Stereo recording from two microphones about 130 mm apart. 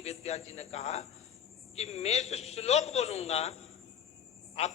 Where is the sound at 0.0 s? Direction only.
55° left (ahead or behind).